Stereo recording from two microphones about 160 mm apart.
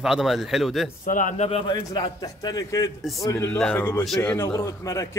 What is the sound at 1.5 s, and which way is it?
A man's voice, 35° left (ahead or behind).